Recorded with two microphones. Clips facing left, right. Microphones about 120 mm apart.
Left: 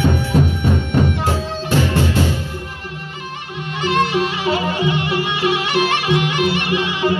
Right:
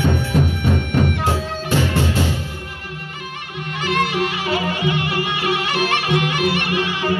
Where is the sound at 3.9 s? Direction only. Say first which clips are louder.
Left 3 dB; 30° left (ahead or behind).